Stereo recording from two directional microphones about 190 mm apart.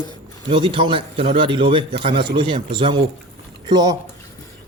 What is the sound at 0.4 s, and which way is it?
A man's voice, 25° right (ahead or behind).